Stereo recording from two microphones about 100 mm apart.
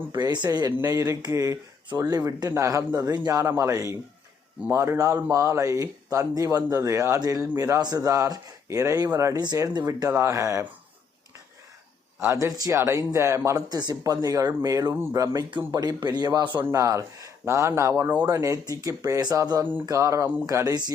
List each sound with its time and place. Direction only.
0.1 s a man's voice: 45° right (ahead or behind)
0.8 s speech: 35° right (ahead or behind)
12.3 s speech: 35° right (ahead or behind)
13.7 s a man's voice: 40° right (ahead or behind)